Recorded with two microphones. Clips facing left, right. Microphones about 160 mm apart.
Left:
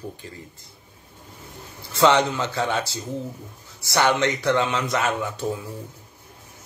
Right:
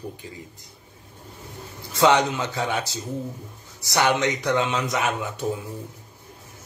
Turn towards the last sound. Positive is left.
turn(degrees=-15)  # may be behind; listen again after turning